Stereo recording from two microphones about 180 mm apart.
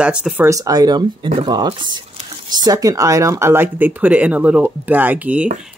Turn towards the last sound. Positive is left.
turn(degrees=-10)  # may be behind; listen again after turning